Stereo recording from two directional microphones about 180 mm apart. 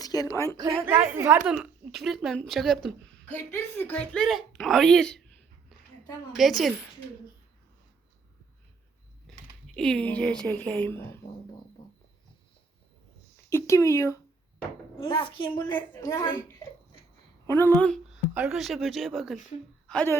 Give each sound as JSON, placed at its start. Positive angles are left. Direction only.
{"t": 0.0, "sound": "speech", "side_deg": 20}
{"t": 0.5, "sound": "a woman's voice", "side_deg": -20}
{"t": 1.0, "sound": "a woman's voice", "side_deg": -10}
{"t": 3.2, "sound": "a woman's voice", "side_deg": 15}
{"t": 6.3, "sound": "a woman's voice", "side_deg": 0}
{"t": 9.3, "sound": "typing", "side_deg": 0}
{"t": 9.7, "sound": "speech", "side_deg": 5}
{"t": 13.5, "sound": "speech", "side_deg": 15}
{"t": 14.9, "sound": "a woman's voice", "side_deg": 30}